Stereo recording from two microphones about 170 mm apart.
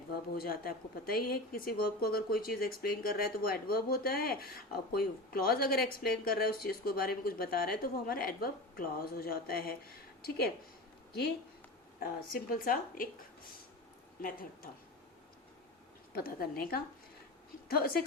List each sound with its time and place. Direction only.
0.3 s speech: 60° left (ahead or behind)
11.9 s speech: 60° left (ahead or behind)
14.2 s speech: 55° left (ahead or behind)
16.1 s speech: 60° left (ahead or behind)